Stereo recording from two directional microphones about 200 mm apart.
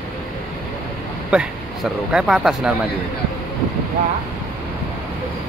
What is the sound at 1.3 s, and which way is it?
Speech, 5° right (ahead or behind).